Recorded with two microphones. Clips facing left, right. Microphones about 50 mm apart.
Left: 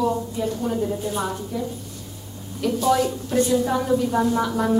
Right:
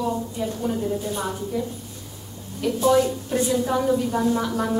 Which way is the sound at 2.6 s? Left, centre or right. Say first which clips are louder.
Right 1 dB; centre.